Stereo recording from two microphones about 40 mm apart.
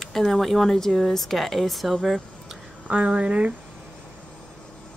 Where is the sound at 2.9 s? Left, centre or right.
Right.